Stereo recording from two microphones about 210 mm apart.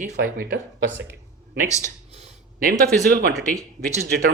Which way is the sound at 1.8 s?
30° right (ahead or behind).